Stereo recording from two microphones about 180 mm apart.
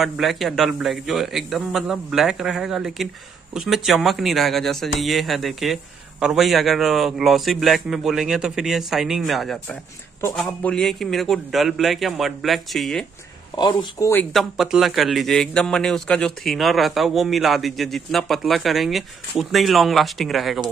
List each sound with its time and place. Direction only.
0.0 s a man's voice: centre (ahead or behind)
13.6 s speech: 25° left (ahead or behind)
14.3 s a man's voice: centre (ahead or behind)